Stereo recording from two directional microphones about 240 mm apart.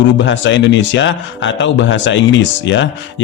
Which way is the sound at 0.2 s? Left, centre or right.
Left.